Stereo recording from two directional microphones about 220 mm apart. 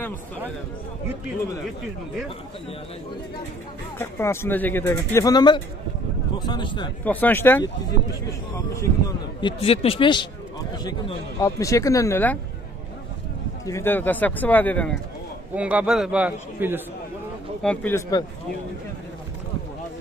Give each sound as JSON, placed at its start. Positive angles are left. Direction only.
{"t": 4.0, "sound": "speech", "side_deg": 10}
{"t": 7.1, "sound": "speech", "side_deg": 10}
{"t": 13.7, "sound": "speech", "side_deg": 10}
{"t": 15.5, "sound": "a man's voice", "side_deg": -5}
{"t": 17.6, "sound": "speech", "side_deg": 5}